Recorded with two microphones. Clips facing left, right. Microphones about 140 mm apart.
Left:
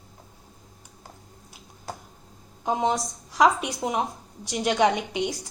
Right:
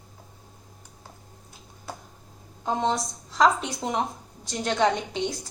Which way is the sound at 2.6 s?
15° left (ahead or behind).